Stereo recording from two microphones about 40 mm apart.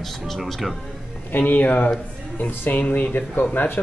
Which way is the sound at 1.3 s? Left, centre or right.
Left.